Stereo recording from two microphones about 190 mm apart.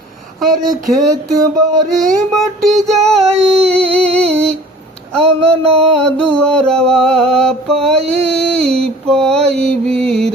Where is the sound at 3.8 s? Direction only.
30° right (ahead or behind).